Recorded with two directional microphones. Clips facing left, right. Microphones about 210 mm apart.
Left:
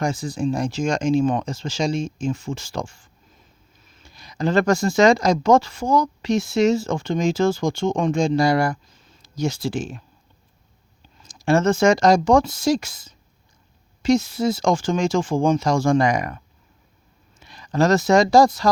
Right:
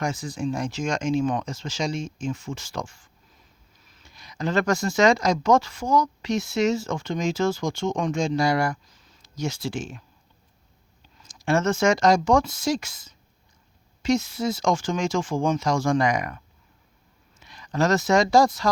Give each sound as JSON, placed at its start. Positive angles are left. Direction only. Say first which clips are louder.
{"t": 0.0, "sound": "speech", "louder": "left 4 dB", "side_deg": 30}
{"t": 11.2, "sound": "speech", "louder": "left 4 dB", "side_deg": 30}
{"t": 17.4, "sound": "speech", "louder": "left 4 dB", "side_deg": 30}